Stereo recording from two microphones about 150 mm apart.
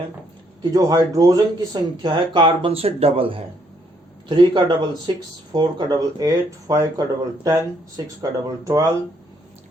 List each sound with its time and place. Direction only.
0.6 s speech: 25° right (ahead or behind)